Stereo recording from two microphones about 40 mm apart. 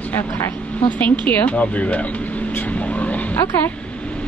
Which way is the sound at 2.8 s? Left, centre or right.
Left.